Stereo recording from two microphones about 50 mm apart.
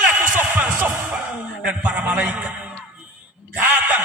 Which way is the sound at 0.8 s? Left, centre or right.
Right.